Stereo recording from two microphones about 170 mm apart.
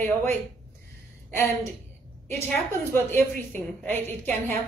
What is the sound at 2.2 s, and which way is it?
A woman's voice, 15° left (ahead or behind).